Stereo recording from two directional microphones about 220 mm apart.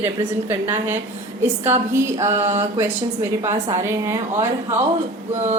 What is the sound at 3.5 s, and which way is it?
Speech, 15° right (ahead or behind).